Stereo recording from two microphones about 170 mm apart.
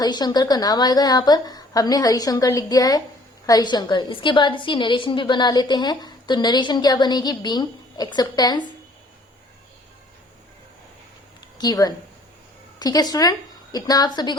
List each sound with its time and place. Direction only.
0.0 s a woman's voice: 25° left (ahead or behind)
11.5 s a woman's voice: 25° left (ahead or behind)